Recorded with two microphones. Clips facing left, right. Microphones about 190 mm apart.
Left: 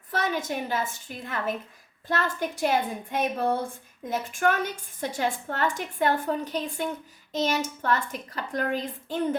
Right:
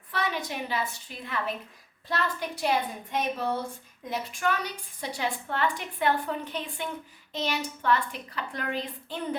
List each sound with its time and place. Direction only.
0.1 s a woman's voice: 45° left (ahead or behind)